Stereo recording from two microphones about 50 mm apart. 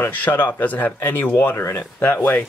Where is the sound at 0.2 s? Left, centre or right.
Left.